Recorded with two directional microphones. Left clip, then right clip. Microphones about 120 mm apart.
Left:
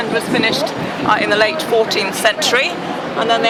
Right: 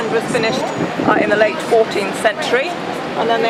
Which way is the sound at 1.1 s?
35° left (ahead or behind).